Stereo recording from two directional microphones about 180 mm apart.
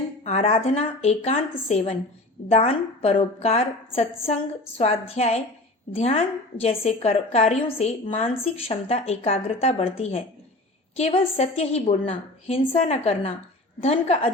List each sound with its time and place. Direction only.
0.3 s a woman's voice: 35° left (ahead or behind)